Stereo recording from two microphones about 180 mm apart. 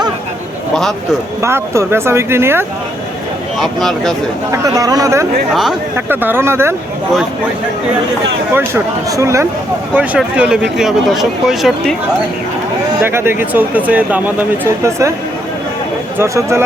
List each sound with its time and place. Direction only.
0.7 s a man's voice: centre (ahead or behind)
1.4 s speech: 15° right (ahead or behind)
3.6 s speech: centre (ahead or behind)
4.5 s speech: 20° right (ahead or behind)
8.5 s speech: 15° right (ahead or behind)
13.0 s speech: 15° right (ahead or behind)
16.1 s speech: 15° right (ahead or behind)